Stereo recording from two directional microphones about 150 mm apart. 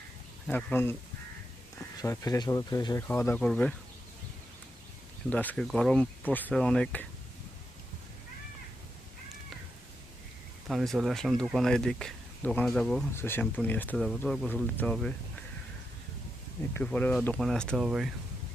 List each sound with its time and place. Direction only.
0.4 s speech: 10° left (ahead or behind)
2.0 s speech: 25° left (ahead or behind)
3.1 s speech: 15° left (ahead or behind)
5.3 s speech: 10° left (ahead or behind)
10.7 s speech: centre (ahead or behind)
13.1 s speech: 15° left (ahead or behind)
13.9 s speech: centre (ahead or behind)
14.2 s speech: 10° left (ahead or behind)
16.7 s speech: 10° left (ahead or behind)